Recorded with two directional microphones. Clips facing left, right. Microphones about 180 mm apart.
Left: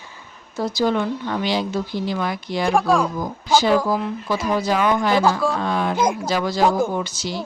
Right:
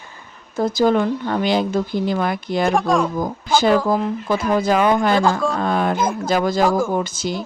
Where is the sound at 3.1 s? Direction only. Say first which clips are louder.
Even; 50° right (ahead or behind).